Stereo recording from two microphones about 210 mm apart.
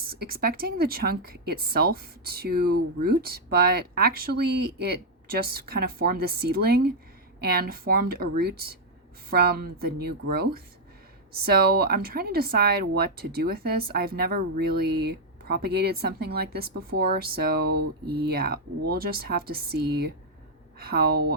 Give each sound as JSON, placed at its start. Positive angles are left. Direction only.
{"t": 0.0, "sound": "speech", "side_deg": -45}